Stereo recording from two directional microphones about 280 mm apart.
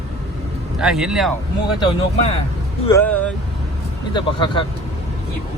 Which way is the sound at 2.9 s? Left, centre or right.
Centre.